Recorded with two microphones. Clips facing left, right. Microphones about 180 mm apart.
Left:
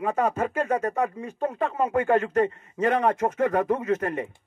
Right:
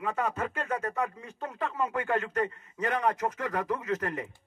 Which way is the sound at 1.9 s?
45° left (ahead or behind).